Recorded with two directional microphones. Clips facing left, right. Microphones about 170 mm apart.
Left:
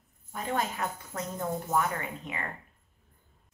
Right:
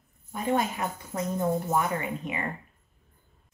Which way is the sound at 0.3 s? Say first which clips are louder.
Right 5 dB; 15° right (ahead or behind).